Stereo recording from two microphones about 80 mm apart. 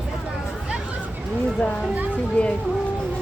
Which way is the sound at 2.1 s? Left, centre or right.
Centre.